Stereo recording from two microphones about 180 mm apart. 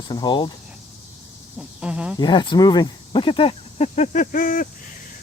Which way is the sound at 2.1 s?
25° left (ahead or behind).